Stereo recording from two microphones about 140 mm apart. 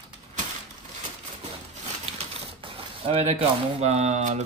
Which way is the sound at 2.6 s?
40° right (ahead or behind).